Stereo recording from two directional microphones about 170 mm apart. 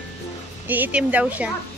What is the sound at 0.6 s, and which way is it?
Speech, 10° right (ahead or behind).